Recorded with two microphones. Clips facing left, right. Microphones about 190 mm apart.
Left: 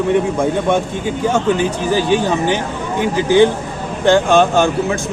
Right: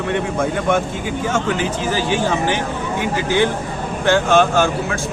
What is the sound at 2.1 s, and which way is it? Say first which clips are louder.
Speech: left 2 dB; 15° left (ahead or behind).